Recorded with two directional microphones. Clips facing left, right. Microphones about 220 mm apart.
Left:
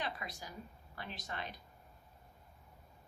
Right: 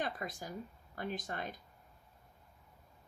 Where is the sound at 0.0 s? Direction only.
50° right (ahead or behind).